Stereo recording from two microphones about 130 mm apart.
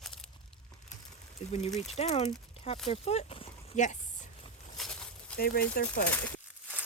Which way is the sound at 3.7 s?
70° left (ahead or behind).